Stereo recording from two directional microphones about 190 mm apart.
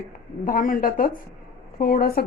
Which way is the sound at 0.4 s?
45° left (ahead or behind).